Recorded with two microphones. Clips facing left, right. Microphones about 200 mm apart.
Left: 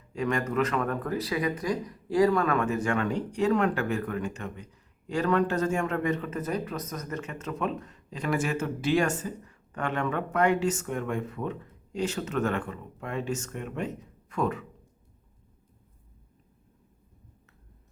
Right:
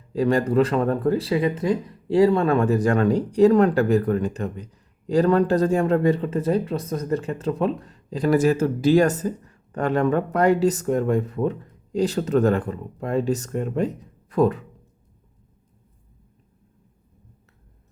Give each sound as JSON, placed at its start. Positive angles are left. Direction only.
{"t": 0.1, "sound": "speech", "side_deg": -35}